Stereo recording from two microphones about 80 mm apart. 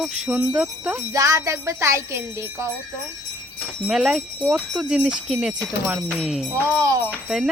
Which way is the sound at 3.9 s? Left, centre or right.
Centre.